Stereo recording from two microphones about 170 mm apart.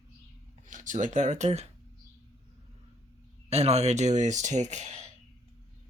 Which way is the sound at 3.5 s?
40° right (ahead or behind).